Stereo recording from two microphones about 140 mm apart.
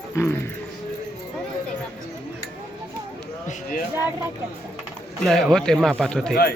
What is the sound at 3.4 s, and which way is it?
Speech, 90° left.